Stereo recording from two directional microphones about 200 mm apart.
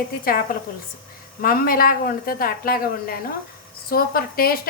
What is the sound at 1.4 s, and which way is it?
A woman's voice, 45° left (ahead or behind).